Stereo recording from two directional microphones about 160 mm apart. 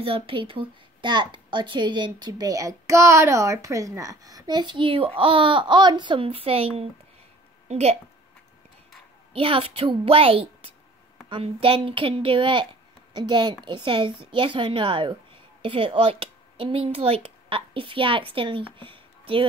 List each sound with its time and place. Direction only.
0.0 s a woman's voice: 35° right (ahead or behind)
9.3 s a woman's voice: 35° right (ahead or behind)